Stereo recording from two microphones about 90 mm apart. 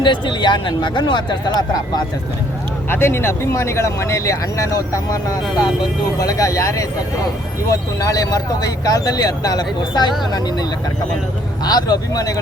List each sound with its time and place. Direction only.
0.0 s speech: 60° left (ahead or behind)
2.9 s speech: 25° left (ahead or behind); by 12.3 s 45° left (ahead or behind)